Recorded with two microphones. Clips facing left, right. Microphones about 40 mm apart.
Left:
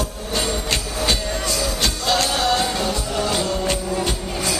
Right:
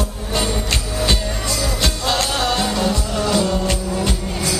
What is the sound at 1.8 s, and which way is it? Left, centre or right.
Music, right.